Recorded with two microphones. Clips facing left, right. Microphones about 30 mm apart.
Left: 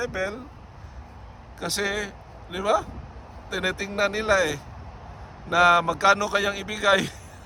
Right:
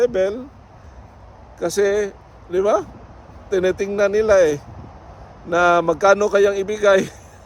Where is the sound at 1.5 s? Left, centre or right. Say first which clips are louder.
Right 10 dB; left.